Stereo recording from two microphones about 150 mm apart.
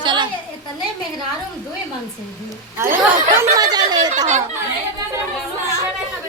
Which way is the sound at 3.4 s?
25° right (ahead or behind).